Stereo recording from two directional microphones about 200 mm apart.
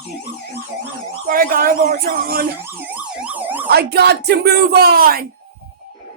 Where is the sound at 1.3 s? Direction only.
45° right (ahead or behind).